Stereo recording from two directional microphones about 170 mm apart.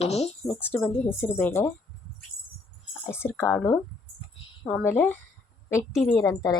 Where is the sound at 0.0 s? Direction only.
40° left (ahead or behind).